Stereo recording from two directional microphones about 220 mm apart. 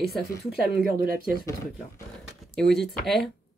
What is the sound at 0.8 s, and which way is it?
Speech, 40° right (ahead or behind).